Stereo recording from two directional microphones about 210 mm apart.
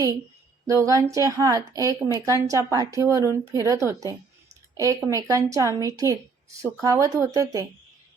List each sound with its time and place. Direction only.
0.7 s speech: 15° right (ahead or behind)